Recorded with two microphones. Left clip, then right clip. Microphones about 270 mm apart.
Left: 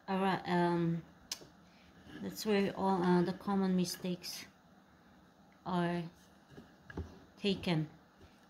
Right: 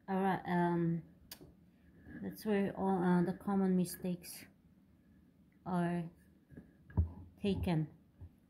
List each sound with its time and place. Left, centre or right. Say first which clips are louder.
0.0 s a sound: left 1 dB; centre
2.2 s speech: left 3 dB; centre
5.6 s speech: left 2 dB; centre
7.3 s a woman's voice: left 2 dB; centre